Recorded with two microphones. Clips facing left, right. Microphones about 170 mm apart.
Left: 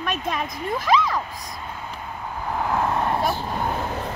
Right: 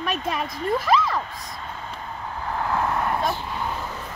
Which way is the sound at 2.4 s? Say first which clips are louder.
Left 1 dB; 15° left (ahead or behind).